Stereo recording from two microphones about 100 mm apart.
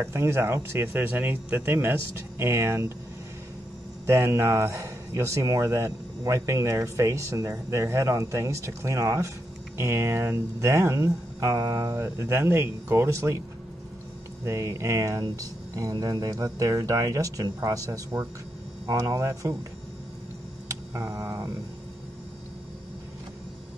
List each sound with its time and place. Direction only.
0.0 s speech: 25° right (ahead or behind)
4.0 s a man's voice: 30° right (ahead or behind)
14.4 s a man's voice: 30° right (ahead or behind)
20.9 s a man's voice: 30° right (ahead or behind)